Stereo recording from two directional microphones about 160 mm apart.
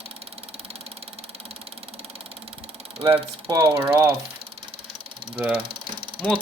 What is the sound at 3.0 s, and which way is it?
Speech, 35° right (ahead or behind).